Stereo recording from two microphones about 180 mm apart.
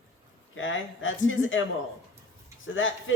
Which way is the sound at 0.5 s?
90° left.